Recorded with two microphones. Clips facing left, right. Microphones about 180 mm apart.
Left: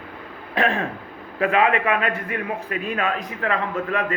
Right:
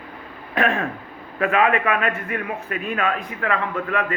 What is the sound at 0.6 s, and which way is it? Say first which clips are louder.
A man's voice: right 1 dB; 30° left (ahead or behind).